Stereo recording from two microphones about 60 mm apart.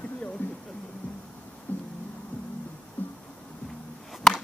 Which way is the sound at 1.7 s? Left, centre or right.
Left.